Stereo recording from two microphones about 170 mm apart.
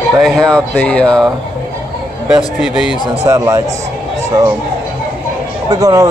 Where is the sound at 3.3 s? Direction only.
20° right (ahead or behind).